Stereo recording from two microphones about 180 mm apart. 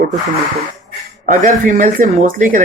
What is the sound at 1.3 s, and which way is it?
Speech, 45° right (ahead or behind).